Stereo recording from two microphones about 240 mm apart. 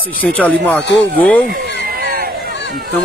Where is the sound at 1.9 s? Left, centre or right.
Right.